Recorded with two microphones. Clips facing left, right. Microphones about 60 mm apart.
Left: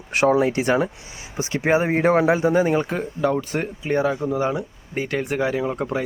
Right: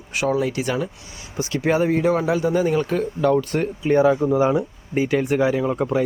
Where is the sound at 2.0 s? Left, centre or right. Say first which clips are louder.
Left 2 dB; left.